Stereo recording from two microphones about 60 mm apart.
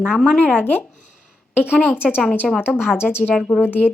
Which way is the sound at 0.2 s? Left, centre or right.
Centre.